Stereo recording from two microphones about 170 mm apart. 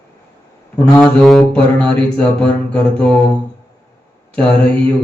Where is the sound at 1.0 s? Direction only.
Centre (ahead or behind).